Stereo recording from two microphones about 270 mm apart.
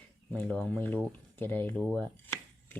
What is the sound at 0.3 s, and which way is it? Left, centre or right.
Speech, centre.